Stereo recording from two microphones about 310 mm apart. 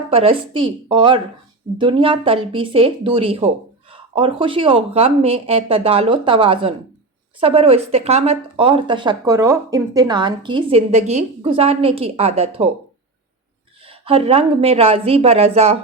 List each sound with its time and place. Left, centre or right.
0.1 s speech: centre
13.8 s speech: centre